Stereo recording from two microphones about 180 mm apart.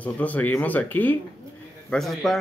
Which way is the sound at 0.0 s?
10° left (ahead or behind).